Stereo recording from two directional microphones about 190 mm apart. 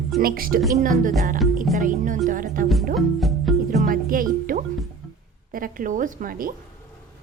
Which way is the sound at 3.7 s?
45° right (ahead or behind).